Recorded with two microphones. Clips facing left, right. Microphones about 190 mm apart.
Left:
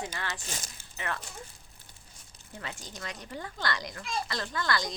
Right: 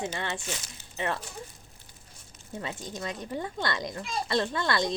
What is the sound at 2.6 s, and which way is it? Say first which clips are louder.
Speech: right 5 dB; 25° right (ahead or behind).